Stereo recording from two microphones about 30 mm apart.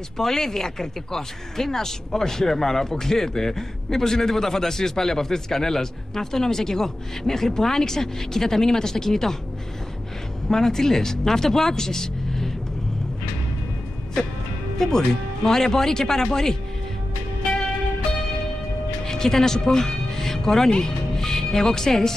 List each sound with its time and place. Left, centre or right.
0.2 s speech: centre
10.5 s speech: centre
14.8 s speech: centre
19.0 s speech: centre